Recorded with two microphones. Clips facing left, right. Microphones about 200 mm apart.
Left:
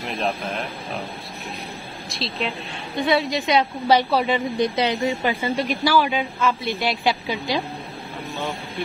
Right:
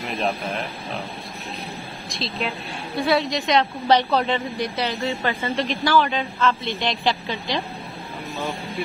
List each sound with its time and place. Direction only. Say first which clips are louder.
0.0 s a woman's voice: even; centre (ahead or behind)
2.0 s a woman's voice: left 1 dB; centre (ahead or behind)
8.4 s a woman's voice: right 1 dB; centre (ahead or behind)